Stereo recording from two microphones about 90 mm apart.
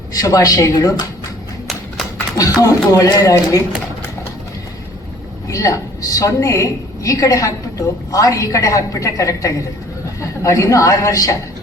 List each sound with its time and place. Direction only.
0.1 s speech: 40° left (ahead or behind)
2.4 s a woman's voice: 40° left (ahead or behind)
5.5 s a woman's voice: 40° left (ahead or behind)